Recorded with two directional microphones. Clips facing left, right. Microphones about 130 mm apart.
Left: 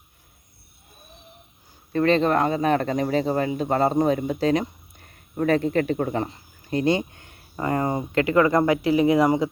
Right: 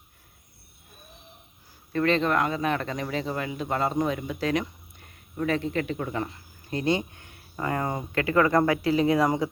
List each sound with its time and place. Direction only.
1.9 s speech: 35° left (ahead or behind); by 9.5 s 15° left (ahead or behind)